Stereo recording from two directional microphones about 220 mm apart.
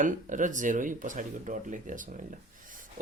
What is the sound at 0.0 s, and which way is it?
Speech, 35° right (ahead or behind).